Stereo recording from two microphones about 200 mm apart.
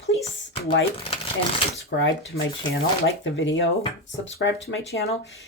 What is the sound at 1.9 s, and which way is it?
Speech, 50° left (ahead or behind).